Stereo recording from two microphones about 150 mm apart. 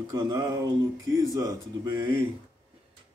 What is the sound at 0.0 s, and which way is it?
Speech, 25° right (ahead or behind).